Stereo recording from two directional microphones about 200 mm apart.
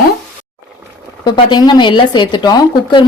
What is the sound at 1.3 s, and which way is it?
Speech, 20° left (ahead or behind).